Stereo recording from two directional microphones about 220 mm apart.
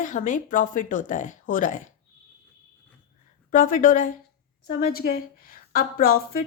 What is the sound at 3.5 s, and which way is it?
A woman's voice, 40° left (ahead or behind).